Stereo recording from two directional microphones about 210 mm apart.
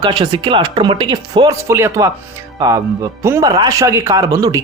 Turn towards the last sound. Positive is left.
turn(degrees=-15)  # may be behind; listen again after turning